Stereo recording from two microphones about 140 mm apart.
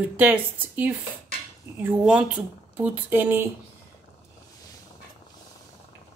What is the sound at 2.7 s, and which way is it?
Speech, 10° right (ahead or behind).